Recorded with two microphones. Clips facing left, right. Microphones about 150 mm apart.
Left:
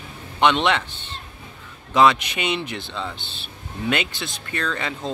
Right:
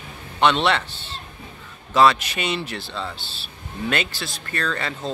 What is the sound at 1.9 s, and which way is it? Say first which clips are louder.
Speech: even; 15° left (ahead or behind).